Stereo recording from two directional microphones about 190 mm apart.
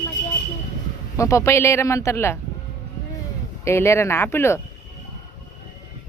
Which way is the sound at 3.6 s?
15° left (ahead or behind).